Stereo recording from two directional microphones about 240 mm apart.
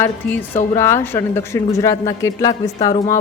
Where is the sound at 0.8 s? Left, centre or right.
Centre.